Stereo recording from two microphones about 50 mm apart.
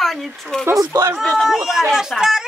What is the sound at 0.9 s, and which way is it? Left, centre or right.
Speech, right.